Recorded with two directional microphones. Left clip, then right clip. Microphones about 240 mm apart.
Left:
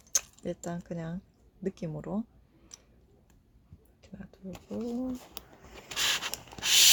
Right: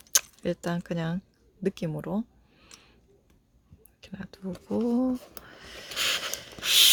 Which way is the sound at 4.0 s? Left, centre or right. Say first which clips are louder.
Right 7 dB; right.